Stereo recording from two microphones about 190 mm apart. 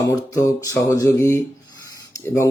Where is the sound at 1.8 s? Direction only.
15° left (ahead or behind).